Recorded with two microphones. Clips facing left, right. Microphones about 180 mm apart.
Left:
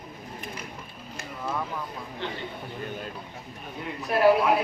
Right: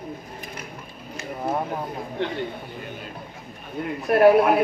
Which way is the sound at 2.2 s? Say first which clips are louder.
Right 7 dB; 60° right (ahead or behind).